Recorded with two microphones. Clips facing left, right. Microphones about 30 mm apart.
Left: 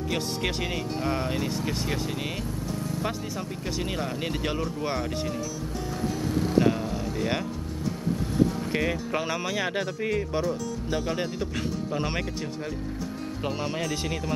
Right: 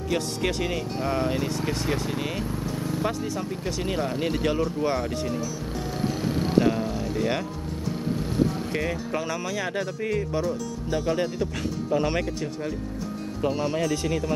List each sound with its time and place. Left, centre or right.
0.1 s speech: centre
3.1 s speech: centre
6.6 s speech: centre
8.7 s speech: centre
13.6 s speech: centre